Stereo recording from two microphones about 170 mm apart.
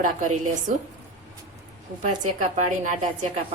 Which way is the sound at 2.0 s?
45° right (ahead or behind).